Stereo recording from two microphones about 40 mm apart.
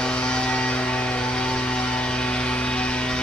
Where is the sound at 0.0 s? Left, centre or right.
Left.